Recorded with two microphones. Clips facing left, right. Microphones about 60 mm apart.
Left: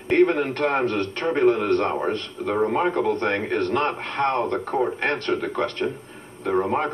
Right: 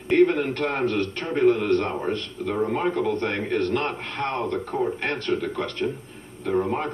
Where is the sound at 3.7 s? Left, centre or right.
Left.